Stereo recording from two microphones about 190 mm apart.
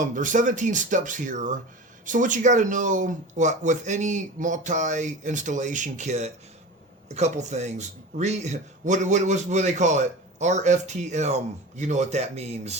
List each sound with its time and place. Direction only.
0.0 s a man's voice: 40° right (ahead or behind)